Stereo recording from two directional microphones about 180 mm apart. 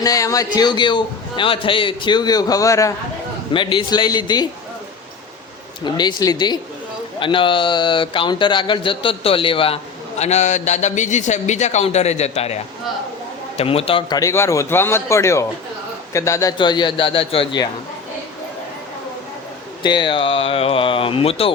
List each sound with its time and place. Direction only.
0.0 s a man's voice: 20° left (ahead or behind)
5.8 s a man's voice: 25° left (ahead or behind)
14.2 s a man's voice: 15° left (ahead or behind)
19.8 s a man's voice: 25° left (ahead or behind)